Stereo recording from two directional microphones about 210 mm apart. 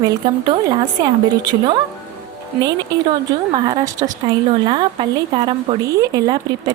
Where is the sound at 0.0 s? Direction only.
15° right (ahead or behind).